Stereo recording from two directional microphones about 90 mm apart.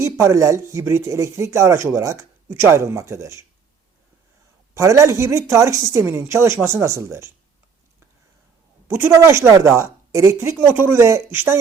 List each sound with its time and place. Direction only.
0.0 s speech: 35° right (ahead or behind)
4.7 s speech: 35° right (ahead or behind)
8.9 s speech: 25° right (ahead or behind)